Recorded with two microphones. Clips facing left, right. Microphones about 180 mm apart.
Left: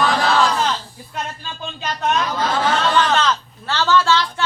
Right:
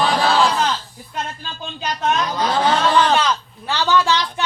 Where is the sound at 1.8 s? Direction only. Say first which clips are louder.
Even; centre (ahead or behind).